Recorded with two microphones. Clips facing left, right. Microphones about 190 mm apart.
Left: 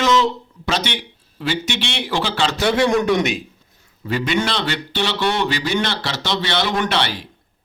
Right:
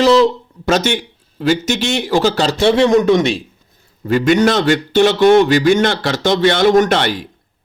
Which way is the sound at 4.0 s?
45° right (ahead or behind).